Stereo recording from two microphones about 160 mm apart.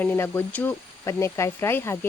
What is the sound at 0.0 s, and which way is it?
Speech, 10° left (ahead or behind).